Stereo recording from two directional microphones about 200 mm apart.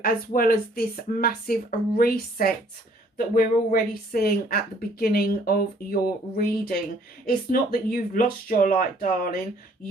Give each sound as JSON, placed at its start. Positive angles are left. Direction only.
{"t": 0.0, "sound": "a woman's voice", "side_deg": 45}